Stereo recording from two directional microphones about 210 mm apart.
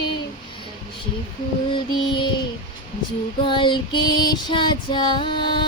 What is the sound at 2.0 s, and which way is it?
Child singing, 20° left (ahead or behind).